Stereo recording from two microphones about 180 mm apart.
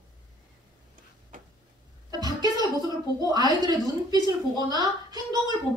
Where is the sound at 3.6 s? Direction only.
20° right (ahead or behind).